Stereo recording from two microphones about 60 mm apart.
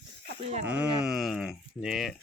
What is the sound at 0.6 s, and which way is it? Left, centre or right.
Speech, right.